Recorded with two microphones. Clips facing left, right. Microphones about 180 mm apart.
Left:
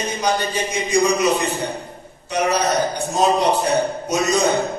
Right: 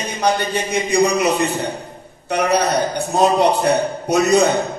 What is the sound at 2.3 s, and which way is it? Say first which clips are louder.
A man's voice: right 2 dB; 60° right (ahead or behind).